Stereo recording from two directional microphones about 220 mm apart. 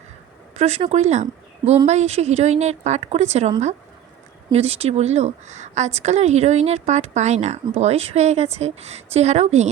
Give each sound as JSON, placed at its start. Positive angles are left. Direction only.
{"t": 0.5, "sound": "a woman's voice", "side_deg": -30}